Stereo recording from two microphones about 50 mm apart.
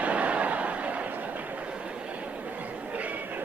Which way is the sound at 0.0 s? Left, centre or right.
Right.